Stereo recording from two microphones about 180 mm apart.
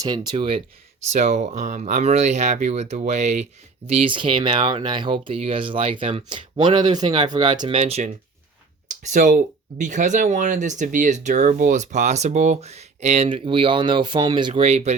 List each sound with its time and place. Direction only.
0.3 s speech: 30° right (ahead or behind)
1.1 s speech: 40° right (ahead or behind); by 7.8 s 25° right (ahead or behind)
7.8 s speech: 35° right (ahead or behind)